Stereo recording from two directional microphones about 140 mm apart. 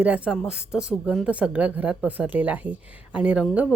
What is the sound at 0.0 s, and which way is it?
A woman's voice, 5° right (ahead or behind).